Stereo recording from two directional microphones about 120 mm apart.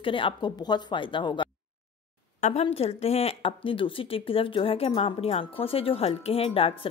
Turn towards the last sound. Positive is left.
turn(degrees=50)  # may be behind; listen again after turning